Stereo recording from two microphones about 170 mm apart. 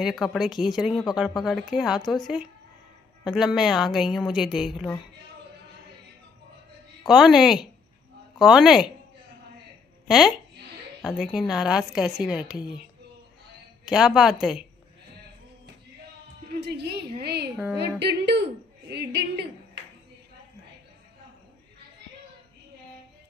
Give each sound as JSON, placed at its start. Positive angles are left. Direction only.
{"t": 0.0, "sound": "a woman's voice", "side_deg": 0}
{"t": 7.0, "sound": "a woman's voice", "side_deg": 0}
{"t": 10.0, "sound": "a woman's voice", "side_deg": 0}
{"t": 13.8, "sound": "a woman's voice", "side_deg": -5}
{"t": 16.4, "sound": "a sound", "side_deg": -75}
{"t": 17.2, "sound": "a woman's voice", "side_deg": -70}
{"t": 17.7, "sound": "a woman's voice", "side_deg": -90}